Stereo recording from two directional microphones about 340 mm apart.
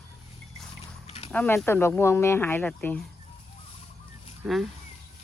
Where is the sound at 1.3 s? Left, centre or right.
Centre.